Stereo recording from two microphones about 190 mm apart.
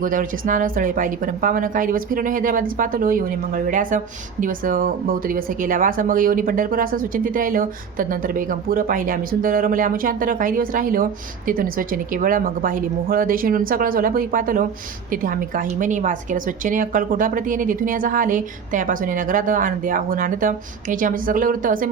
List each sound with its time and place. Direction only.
0.0 s a woman's voice: 45° right (ahead or behind)